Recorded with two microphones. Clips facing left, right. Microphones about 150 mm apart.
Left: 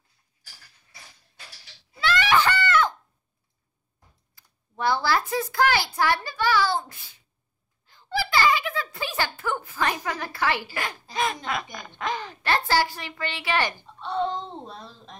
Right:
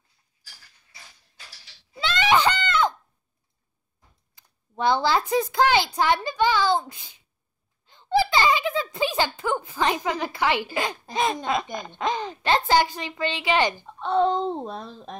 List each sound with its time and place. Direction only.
2.0 s screaming: 20° right (ahead or behind)
4.4 s a child's voice: 20° right (ahead or behind)
14.0 s a child's voice: 50° right (ahead or behind)